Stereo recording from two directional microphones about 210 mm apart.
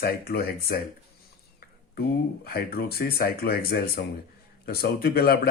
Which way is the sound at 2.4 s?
45° left (ahead or behind).